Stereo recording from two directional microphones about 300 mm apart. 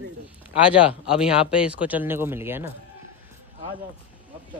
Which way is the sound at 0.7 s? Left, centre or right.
Centre.